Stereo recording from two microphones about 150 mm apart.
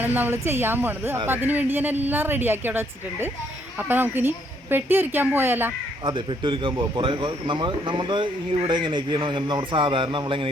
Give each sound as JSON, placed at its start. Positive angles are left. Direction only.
{"t": 0.0, "sound": "a woman's voice", "side_deg": -10}
{"t": 6.1, "sound": "speech", "side_deg": -35}